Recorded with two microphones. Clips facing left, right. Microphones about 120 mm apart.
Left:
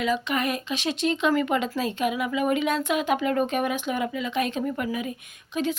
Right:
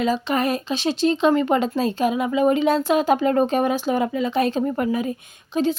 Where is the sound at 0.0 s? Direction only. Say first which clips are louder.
Right 4 dB; 35° right (ahead or behind).